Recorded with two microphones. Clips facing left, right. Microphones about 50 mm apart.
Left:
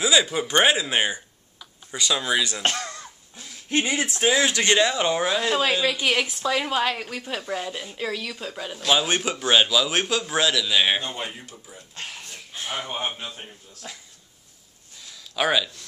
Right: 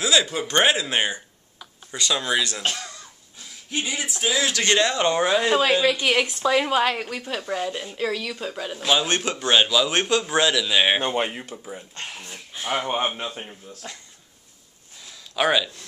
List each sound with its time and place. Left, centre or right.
0.0 s a woman's voice: centre
2.6 s speech: left
4.6 s a woman's voice: centre
11.0 s speech: right
11.9 s a woman's voice: centre
12.6 s speech: right
15.0 s a sound: centre